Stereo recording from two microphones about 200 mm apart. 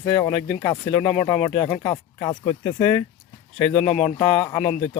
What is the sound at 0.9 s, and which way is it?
Speech, 5° left (ahead or behind).